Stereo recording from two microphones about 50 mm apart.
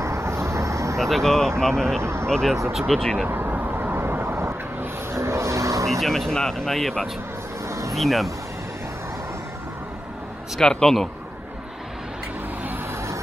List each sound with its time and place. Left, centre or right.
0.0 s vehicle: right
0.9 s speech: centre
2.0 s speech: right
2.2 s speech: centre
3.3 s vehicle: right
5.2 s vehicle: right
5.9 s speech: centre
7.6 s vehicle: right
7.9 s speech: centre
10.6 s speech: centre